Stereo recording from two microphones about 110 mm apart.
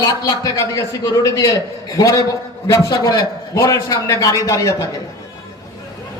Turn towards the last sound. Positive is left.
turn(degrees=30)  # may be behind; listen again after turning